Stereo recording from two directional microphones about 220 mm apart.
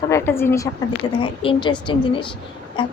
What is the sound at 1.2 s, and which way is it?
A woman's voice, 20° left (ahead or behind).